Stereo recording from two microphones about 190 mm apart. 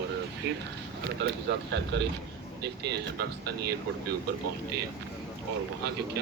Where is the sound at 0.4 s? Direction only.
60° right (ahead or behind).